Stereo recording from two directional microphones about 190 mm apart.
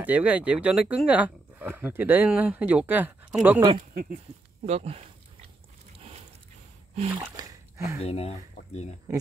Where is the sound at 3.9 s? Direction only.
45° right (ahead or behind).